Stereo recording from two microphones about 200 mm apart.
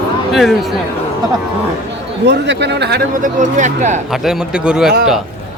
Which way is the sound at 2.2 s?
60° right (ahead or behind).